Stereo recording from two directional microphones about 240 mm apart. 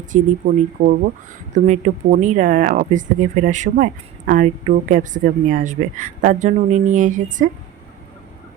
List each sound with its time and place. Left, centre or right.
0.1 s a woman's voice: right